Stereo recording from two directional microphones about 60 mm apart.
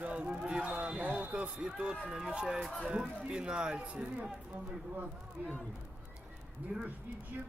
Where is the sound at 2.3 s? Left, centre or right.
Centre.